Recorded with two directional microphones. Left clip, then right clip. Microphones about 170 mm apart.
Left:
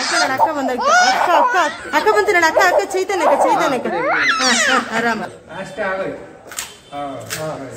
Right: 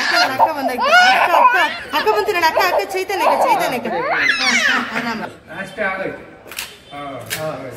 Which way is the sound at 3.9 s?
Centre (ahead or behind).